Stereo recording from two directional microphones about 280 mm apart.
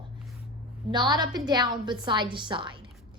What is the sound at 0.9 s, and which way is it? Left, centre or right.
A woman's voice, centre.